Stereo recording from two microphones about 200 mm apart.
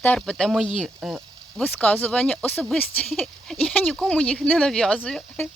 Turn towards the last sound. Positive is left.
turn(degrees=5)  # may be behind; listen again after turning